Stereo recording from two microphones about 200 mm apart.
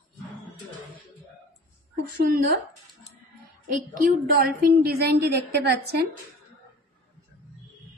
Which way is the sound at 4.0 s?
45° right (ahead or behind).